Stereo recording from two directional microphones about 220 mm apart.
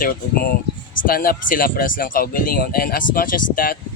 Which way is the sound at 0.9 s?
40° left (ahead or behind).